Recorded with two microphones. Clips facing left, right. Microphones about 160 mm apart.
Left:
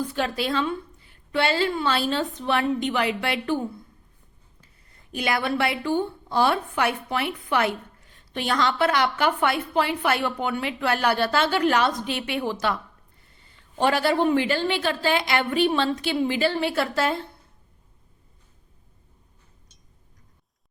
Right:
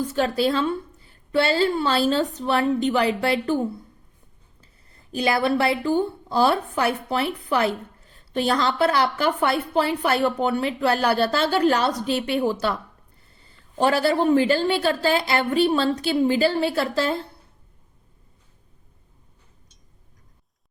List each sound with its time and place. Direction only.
0.0 s speech: 40° right (ahead or behind)
13.3 s a sound: 35° right (ahead or behind)
14.3 s speech: 40° right (ahead or behind)